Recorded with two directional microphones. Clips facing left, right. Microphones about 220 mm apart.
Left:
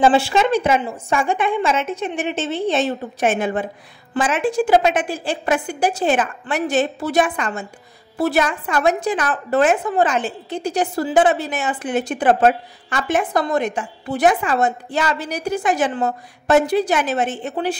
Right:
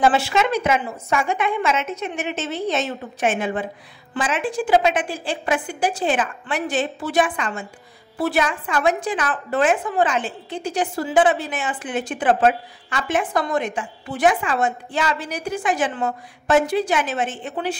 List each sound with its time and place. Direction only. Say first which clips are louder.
0.0 s a woman's voice: left 3 dB; 30° left (ahead or behind)